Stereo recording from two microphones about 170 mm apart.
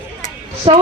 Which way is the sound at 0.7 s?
35° right (ahead or behind).